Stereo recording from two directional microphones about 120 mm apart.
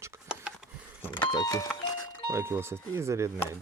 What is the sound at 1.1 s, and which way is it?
Vehicle, 40° left (ahead or behind).